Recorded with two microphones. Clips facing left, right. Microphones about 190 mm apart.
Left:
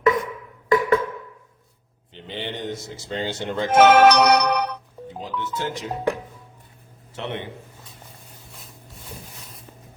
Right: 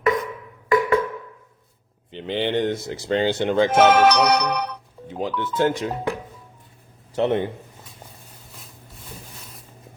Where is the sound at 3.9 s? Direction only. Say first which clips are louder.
Left 2 dB; 70° left (ahead or behind).